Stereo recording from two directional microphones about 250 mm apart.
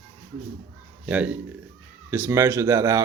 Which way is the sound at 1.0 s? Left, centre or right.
Centre.